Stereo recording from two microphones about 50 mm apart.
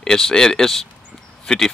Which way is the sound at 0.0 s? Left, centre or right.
Centre.